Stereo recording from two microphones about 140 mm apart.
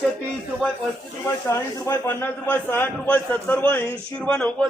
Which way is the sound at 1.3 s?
20° left (ahead or behind).